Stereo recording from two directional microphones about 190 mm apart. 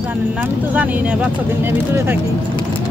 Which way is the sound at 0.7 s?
5° right (ahead or behind).